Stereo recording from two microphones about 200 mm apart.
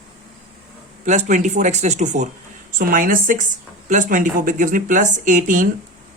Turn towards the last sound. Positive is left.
turn(degrees=-40)  # may be behind; listen again after turning